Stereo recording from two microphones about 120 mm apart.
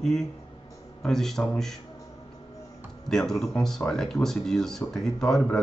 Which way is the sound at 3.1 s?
5° left (ahead or behind).